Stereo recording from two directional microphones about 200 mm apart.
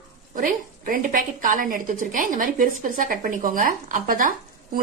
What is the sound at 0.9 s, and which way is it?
A woman's voice, 40° right (ahead or behind).